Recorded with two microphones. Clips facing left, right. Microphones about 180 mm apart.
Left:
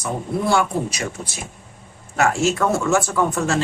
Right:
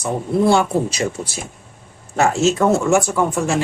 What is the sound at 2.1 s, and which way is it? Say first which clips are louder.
Speech: right 3 dB; 25° right (ahead or behind).